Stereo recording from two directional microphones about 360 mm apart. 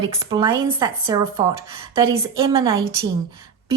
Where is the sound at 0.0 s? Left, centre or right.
Centre.